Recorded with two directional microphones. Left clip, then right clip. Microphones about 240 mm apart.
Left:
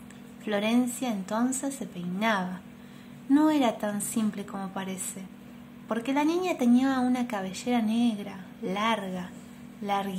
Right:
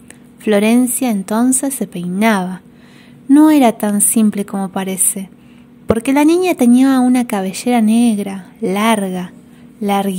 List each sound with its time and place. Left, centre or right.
0.4 s speech: right